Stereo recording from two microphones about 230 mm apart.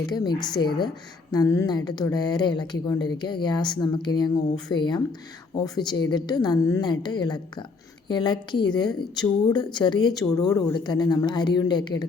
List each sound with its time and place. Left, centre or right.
0.1 s speech: centre